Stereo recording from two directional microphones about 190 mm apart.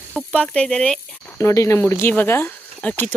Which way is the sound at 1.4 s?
15° left (ahead or behind).